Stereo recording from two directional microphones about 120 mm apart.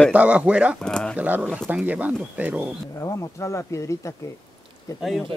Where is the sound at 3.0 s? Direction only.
25° left (ahead or behind).